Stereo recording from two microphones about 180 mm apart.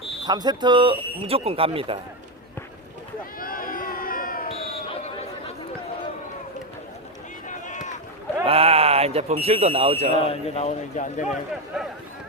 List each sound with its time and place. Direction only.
0.3 s speech: 25° right (ahead or behind)
3.3 s a sound: 55° left (ahead or behind)
7.4 s run: 45° left (ahead or behind)
8.4 s speech: 35° right (ahead or behind)
10.2 s a man's voice: 35° left (ahead or behind)
11.7 s speech: centre (ahead or behind)